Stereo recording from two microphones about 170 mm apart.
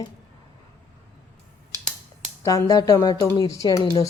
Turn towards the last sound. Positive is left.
turn(degrees=20)  # may be behind; listen again after turning